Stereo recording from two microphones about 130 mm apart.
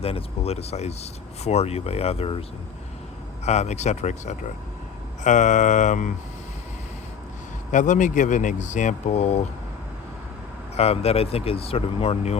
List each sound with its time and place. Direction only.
0.0 s speech: 50° left (ahead or behind)
3.4 s speech: 60° left (ahead or behind)
7.7 s speech: 70° left (ahead or behind)
10.8 s speech: 50° left (ahead or behind)